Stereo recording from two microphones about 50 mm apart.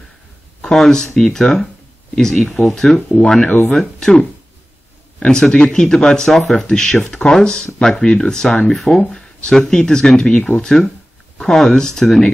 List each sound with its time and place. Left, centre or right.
0.6 s speech: centre
2.4 s speech: centre
2.7 s speech: centre
5.2 s speech: centre